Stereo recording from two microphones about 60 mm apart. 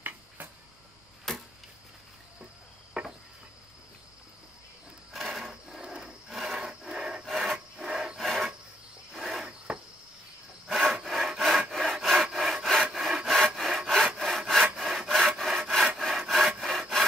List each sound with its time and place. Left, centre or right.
1.3 s a sound: centre
2.9 s cricket: centre
5.1 s a sound: centre
5.5 s wood: centre
6.2 s rub: centre
7.2 s wood: centre
8.2 s a sound: centre
9.1 s cricket: centre
9.7 s cricket: centre
10.7 s wood: centre
11.7 s sawing: centre
16.0 s wood: centre